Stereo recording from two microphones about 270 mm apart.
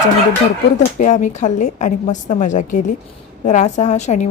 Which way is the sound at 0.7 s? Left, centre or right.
Left.